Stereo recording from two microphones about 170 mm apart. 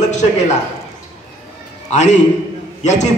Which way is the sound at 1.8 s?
40° left (ahead or behind).